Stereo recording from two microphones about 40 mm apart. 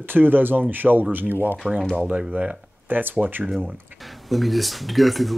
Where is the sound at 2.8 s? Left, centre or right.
Right.